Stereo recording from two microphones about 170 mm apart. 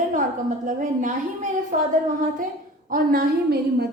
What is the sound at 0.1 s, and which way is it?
A woman's voice, 50° right (ahead or behind).